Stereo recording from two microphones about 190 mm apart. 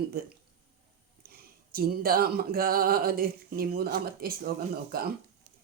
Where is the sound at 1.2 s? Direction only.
50° right (ahead or behind).